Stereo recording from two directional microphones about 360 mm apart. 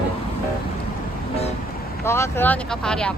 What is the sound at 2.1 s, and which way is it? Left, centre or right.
Speech, centre.